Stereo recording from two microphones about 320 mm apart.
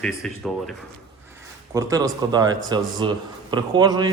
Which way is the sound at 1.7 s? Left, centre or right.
Centre.